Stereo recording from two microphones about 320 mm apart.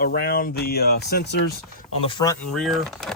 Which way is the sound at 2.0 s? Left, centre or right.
Centre.